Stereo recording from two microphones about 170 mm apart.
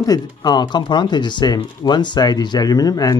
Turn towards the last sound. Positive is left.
turn(degrees=20)  # may be behind; listen again after turning